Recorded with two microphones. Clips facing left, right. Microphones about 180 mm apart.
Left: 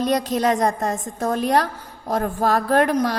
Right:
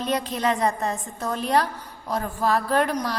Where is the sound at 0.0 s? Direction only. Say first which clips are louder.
Left 5 dB; 40° left (ahead or behind).